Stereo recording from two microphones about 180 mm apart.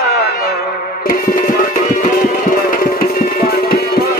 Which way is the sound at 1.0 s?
50° left (ahead or behind).